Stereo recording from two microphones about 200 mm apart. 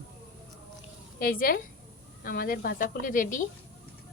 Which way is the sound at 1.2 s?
45° left (ahead or behind).